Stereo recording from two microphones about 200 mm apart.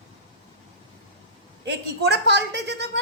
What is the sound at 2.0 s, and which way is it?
Speech, 55° right (ahead or behind).